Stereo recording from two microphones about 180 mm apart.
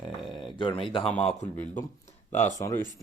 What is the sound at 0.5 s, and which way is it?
Speech, 30° left (ahead or behind).